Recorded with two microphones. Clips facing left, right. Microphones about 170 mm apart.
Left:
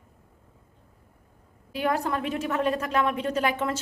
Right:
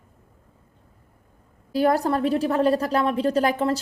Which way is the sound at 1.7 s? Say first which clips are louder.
Right 6 dB; 35° right (ahead or behind).